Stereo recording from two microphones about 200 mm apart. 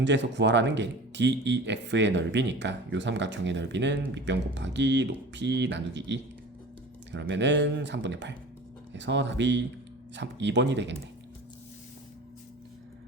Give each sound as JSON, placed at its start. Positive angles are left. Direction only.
{"t": 0.0, "sound": "speech", "side_deg": -60}